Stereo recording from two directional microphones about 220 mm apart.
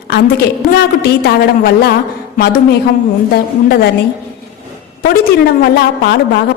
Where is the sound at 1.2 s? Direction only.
45° left (ahead or behind).